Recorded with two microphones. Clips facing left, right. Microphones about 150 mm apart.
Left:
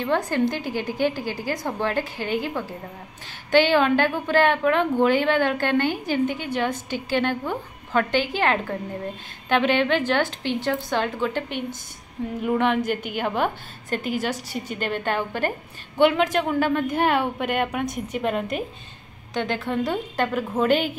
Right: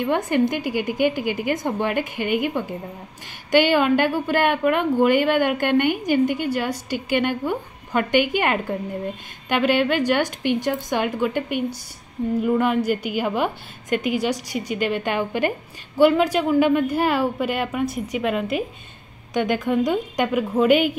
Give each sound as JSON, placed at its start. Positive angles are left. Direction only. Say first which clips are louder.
{"t": 0.0, "sound": "a woman's voice", "louder": "right 2 dB", "side_deg": -15}